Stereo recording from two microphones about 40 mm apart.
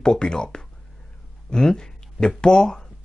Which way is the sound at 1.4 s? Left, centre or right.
Centre.